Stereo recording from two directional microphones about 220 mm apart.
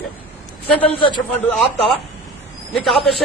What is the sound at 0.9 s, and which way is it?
Speech, 20° left (ahead or behind).